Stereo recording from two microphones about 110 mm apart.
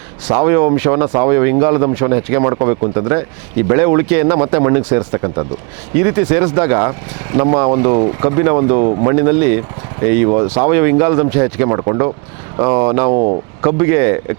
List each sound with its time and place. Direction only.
0.3 s speech: 25° right (ahead or behind)
4.8 s speech: 15° right (ahead or behind)
5.1 s speech: 30° right (ahead or behind)